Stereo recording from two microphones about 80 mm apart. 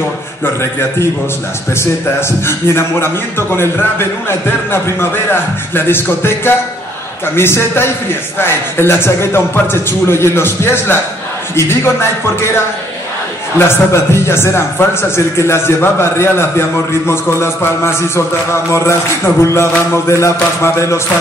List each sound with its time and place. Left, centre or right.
0.6 s a man's voice: left
13.6 s a man's voice: left